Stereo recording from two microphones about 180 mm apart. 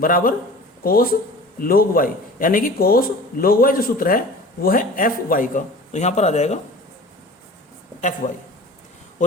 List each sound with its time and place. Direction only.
0.0 s speech: 50° left (ahead or behind)
8.2 s speech: 45° left (ahead or behind)